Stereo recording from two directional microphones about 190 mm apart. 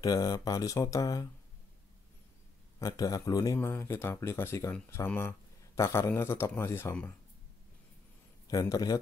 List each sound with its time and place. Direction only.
0.0 s speech: 20° left (ahead or behind)
2.8 s speech: 20° left (ahead or behind)
8.5 s speech: 20° left (ahead or behind)